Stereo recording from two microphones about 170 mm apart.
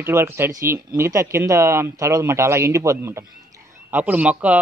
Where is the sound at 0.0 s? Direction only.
15° right (ahead or behind).